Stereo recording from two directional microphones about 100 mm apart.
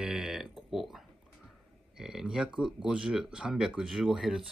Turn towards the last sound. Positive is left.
turn(degrees=-5)  # may be behind; listen again after turning